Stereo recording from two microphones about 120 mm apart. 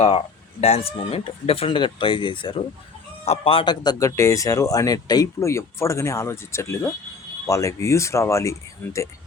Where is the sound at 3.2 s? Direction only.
55° left (ahead or behind); by 9.1 s 25° left (ahead or behind).